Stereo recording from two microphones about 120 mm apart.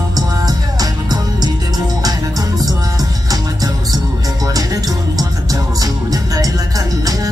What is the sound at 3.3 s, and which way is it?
Music, 30° right (ahead or behind).